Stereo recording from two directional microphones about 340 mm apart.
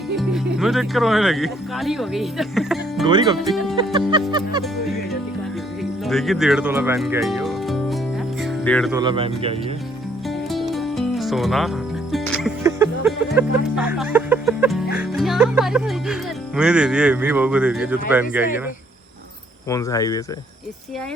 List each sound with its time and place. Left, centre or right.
0.2 s speech: centre
3.1 s speech: centre
3.8 s music: centre
4.3 s speech: centre
6.1 s speech: centre
8.4 s music: centre
9.0 s speech: centre
10.2 s music: centre
16.6 s speech: centre
19.6 s speech: centre